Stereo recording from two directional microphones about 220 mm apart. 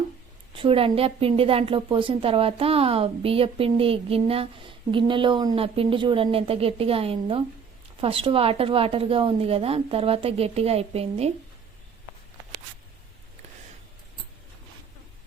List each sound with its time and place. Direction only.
0.5 s a woman's voice: 25° right (ahead or behind)